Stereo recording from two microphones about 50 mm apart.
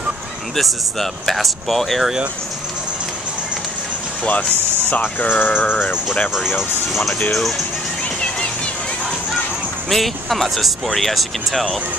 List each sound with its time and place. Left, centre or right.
0.6 s speech: centre
4.3 s speech: left
5.2 s a sound: left
5.6 s speech: left
6.3 s speech: centre
7.3 s speech: centre
9.8 s speech: centre